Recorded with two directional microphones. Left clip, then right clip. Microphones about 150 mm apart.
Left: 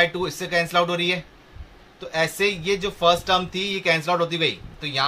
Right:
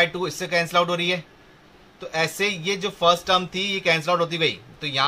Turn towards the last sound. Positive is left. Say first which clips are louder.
# even
turn(degrees=-15)  # may be behind; listen again after turning